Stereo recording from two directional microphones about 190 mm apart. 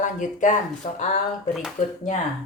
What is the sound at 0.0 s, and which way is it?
Speech, 40° left (ahead or behind).